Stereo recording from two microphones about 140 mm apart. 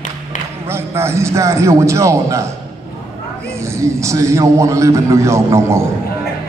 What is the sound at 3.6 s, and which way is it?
A man's voice, 20° right (ahead or behind).